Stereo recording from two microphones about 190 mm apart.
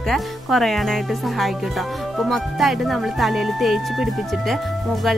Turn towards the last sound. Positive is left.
turn(degrees=0)  # may be behind; listen again after turning